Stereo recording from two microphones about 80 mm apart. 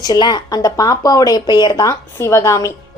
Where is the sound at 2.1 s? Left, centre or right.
Left.